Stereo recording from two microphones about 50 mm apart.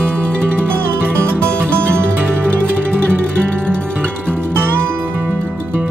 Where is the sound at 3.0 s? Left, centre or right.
Left.